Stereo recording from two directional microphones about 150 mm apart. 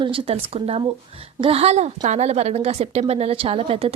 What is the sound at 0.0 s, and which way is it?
A woman's voice, 40° right (ahead or behind).